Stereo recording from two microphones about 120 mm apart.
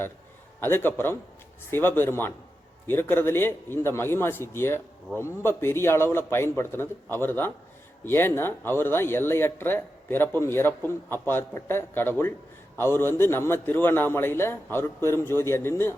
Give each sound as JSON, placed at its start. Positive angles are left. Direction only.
{"t": 0.6, "sound": "a man's voice", "side_deg": 20}